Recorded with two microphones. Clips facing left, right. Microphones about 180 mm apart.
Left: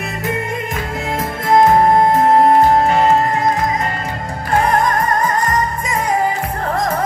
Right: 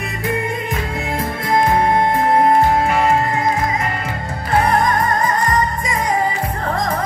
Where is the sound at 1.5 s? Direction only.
45° left (ahead or behind).